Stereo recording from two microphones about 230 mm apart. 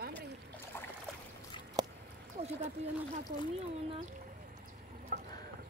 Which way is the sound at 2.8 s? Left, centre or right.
Right.